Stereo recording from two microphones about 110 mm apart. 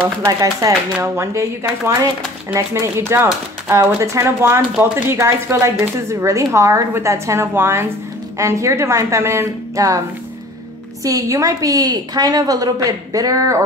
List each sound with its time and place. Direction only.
0.4 s a woman's voice: 30° right (ahead or behind)
11.1 s a woman's voice: 30° right (ahead or behind)